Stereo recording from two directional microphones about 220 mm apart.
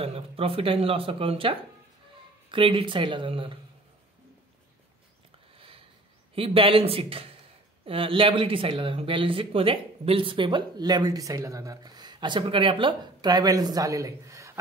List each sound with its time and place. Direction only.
0.0 s speech: 25° right (ahead or behind)
5.6 s a sound: 25° right (ahead or behind)
6.3 s speech: 25° right (ahead or behind)